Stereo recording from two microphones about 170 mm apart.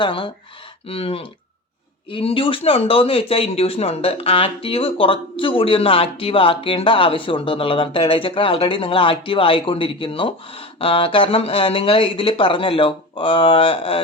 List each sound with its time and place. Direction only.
0.0 s speech: 30° left (ahead or behind)